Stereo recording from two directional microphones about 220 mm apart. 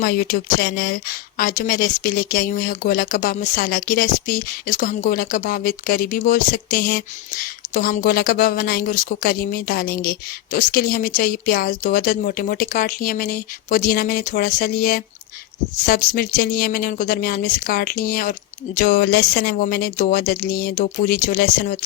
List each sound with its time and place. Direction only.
0.0 s a woman's voice: 40° left (ahead or behind)